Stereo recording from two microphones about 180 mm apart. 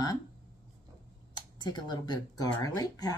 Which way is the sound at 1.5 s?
25° left (ahead or behind).